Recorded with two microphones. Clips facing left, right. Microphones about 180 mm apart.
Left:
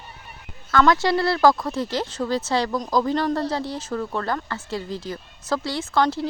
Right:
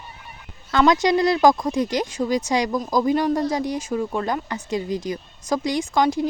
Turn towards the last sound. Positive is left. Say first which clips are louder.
# right 2 dB
turn(degrees=-15)  # may be behind; listen again after turning